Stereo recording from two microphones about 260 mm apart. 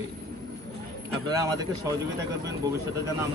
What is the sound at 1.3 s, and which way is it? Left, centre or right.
Speech, centre.